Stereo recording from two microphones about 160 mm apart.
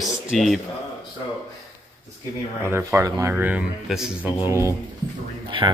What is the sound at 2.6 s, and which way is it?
Speech, 15° right (ahead or behind).